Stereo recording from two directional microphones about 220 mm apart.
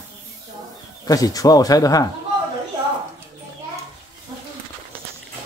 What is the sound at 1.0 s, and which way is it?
Speech, 15° left (ahead or behind).